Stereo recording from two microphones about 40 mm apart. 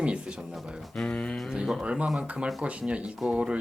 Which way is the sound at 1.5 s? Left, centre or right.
Centre.